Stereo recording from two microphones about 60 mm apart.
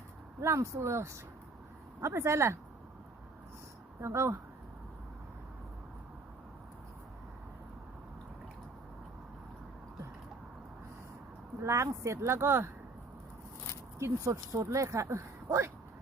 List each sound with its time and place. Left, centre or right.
0.4 s speech: right
4.0 s speech: right
11.6 s speech: right
14.0 s speech: right